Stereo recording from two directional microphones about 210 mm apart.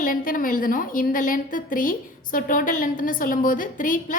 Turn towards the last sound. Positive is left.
turn(degrees=40)  # may be behind; listen again after turning